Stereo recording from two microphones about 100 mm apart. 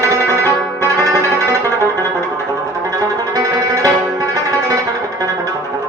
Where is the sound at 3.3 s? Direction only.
35° right (ahead or behind).